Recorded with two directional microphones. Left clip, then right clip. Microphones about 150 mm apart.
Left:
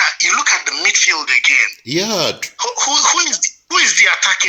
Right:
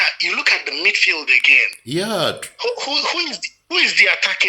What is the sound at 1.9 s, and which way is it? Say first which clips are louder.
Speech: left 3 dB; 10° left (ahead or behind).